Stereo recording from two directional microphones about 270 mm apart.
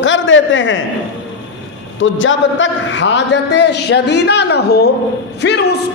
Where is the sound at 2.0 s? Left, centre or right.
Left.